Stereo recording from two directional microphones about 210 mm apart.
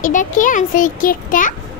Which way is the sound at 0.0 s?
40° left (ahead or behind).